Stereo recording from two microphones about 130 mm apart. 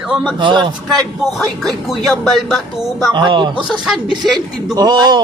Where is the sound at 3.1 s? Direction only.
35° right (ahead or behind).